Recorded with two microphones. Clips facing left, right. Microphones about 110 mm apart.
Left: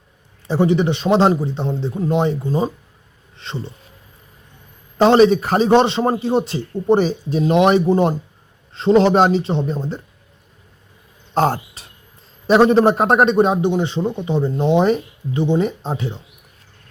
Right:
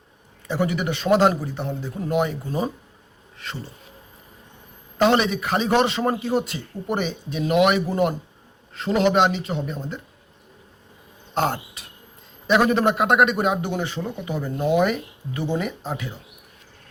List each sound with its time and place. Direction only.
0.4 s a man's voice: 30° left (ahead or behind)
4.9 s a man's voice: 35° left (ahead or behind)
11.3 s insect: 35° left (ahead or behind)
12.5 s a man's voice: 35° left (ahead or behind)